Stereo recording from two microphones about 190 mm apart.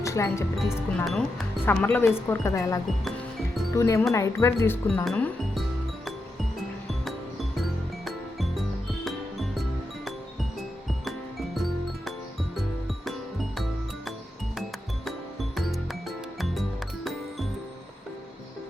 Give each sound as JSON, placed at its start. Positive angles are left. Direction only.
{"t": 0.0, "sound": "speech", "side_deg": 15}
{"t": 0.9, "sound": "speech", "side_deg": 0}
{"t": 5.0, "sound": "music", "side_deg": 5}
{"t": 7.5, "sound": "music", "side_deg": 0}
{"t": 11.5, "sound": "music", "side_deg": 0}
{"t": 15.5, "sound": "music", "side_deg": 0}